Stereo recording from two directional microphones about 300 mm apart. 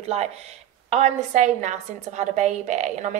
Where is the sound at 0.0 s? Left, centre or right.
Right.